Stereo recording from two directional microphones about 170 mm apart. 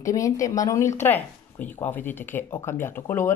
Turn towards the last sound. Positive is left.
turn(degrees=15)  # may be behind; listen again after turning